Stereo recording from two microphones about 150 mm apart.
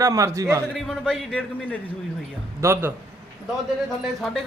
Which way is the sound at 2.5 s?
20° right (ahead or behind).